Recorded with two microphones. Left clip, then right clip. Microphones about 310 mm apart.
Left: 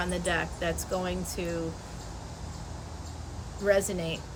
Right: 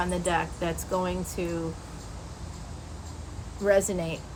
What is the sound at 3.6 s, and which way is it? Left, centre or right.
Speech, centre.